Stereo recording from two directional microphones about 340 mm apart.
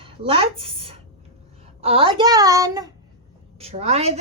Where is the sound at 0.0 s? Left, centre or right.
Centre.